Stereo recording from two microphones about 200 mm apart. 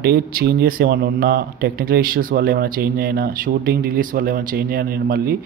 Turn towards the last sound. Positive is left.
turn(degrees=-50)  # may be behind; listen again after turning